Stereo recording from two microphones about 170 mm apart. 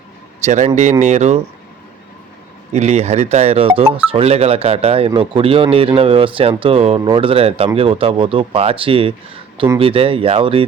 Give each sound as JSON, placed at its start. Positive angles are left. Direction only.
{"t": 0.4, "sound": "speech", "side_deg": -45}
{"t": 2.7, "sound": "speech", "side_deg": -40}